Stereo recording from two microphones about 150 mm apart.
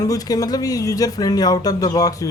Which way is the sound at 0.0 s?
25° left (ahead or behind).